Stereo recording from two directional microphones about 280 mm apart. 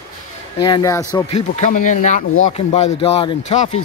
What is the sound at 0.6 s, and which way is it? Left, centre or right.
Speech, centre.